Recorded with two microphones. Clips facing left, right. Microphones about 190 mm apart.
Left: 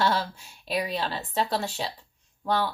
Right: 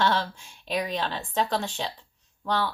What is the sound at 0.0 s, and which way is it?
Speech, 40° left (ahead or behind).